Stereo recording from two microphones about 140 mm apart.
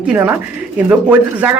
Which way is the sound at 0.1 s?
10° right (ahead or behind).